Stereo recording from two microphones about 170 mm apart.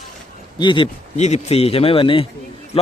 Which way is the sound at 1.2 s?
40° left (ahead or behind).